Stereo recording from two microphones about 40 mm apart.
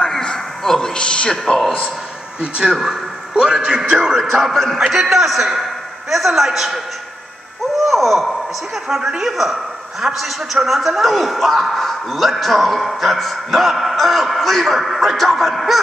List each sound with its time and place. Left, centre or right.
0.0 s a sound: centre
0.9 s a man's voice: left
2.4 s a man's voice: right
4.2 s a man's voice: centre
7.7 s a sound: centre
8.8 s a man's voice: centre